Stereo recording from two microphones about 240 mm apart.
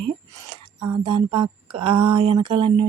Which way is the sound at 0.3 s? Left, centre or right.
Centre.